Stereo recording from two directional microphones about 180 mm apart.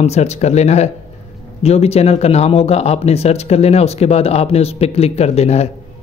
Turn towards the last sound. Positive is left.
turn(degrees=35)  # may be behind; listen again after turning